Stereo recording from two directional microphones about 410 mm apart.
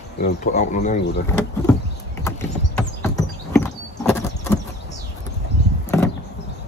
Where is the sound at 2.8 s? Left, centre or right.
Centre.